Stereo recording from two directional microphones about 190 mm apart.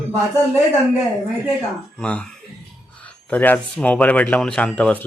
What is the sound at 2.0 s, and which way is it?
Speech, 5° left (ahead or behind).